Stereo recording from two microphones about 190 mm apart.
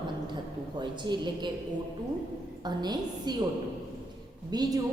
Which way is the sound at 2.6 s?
20° right (ahead or behind).